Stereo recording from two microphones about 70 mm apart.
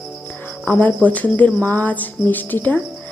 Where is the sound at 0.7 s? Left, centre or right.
Left.